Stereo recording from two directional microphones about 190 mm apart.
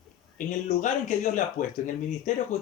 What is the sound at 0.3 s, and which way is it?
Speech, 40° left (ahead or behind).